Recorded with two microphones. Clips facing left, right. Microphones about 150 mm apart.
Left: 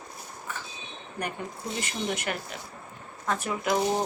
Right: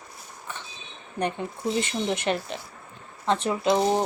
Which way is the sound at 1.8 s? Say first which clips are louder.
Right 5 dB; 25° right (ahead or behind).